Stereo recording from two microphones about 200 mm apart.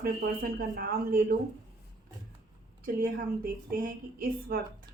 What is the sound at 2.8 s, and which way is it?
Speech, 50° right (ahead or behind).